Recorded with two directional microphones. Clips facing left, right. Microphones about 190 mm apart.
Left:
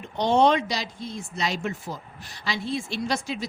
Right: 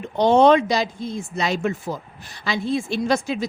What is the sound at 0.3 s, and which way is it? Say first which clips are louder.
Speech: right 5 dB; 50° right (ahead or behind).